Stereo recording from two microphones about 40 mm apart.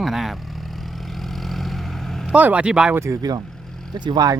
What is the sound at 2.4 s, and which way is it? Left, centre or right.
Speech, right.